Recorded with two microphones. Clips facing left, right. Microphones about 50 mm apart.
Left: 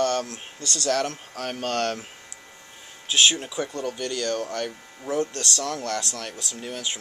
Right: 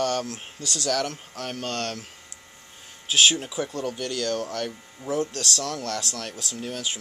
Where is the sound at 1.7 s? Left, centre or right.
Left.